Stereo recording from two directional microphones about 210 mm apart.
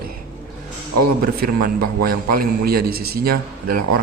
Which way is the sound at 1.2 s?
45° right (ahead or behind).